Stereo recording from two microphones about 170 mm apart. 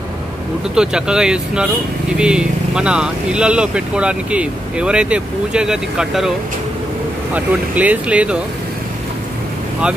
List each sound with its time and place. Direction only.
0.7 s speech: 5° right (ahead or behind)
7.3 s speech: 10° right (ahead or behind)